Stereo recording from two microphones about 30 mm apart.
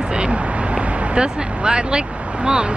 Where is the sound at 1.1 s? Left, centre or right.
Right.